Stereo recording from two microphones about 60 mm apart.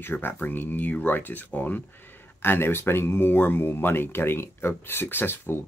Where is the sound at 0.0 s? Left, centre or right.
Left.